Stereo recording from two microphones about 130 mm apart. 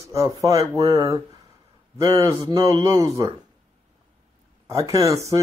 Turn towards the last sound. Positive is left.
turn(degrees=-25)  # may be behind; listen again after turning